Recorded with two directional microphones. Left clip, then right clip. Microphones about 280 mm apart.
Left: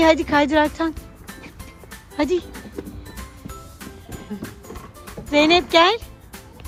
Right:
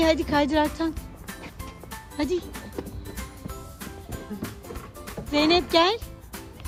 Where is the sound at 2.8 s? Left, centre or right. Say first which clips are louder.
Left 2 dB; centre.